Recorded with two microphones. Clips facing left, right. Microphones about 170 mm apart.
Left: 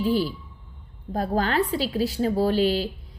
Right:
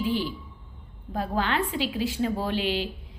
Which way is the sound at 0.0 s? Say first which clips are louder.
Left 4 dB; 40° left (ahead or behind).